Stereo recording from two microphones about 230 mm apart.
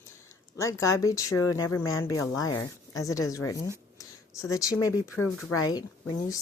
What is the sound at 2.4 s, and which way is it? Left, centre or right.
Speech, left.